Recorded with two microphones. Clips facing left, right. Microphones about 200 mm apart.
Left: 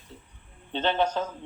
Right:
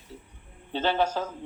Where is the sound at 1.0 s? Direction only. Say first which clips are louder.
Left 1 dB; 10° right (ahead or behind).